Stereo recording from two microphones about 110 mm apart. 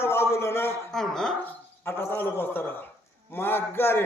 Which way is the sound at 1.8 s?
20° left (ahead or behind).